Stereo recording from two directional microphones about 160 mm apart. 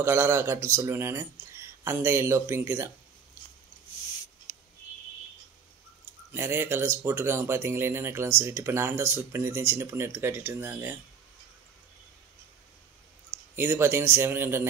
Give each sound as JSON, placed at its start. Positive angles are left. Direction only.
{"t": 0.0, "sound": "speech", "side_deg": -15}
{"t": 6.3, "sound": "speech", "side_deg": -15}
{"t": 13.6, "sound": "speech", "side_deg": -15}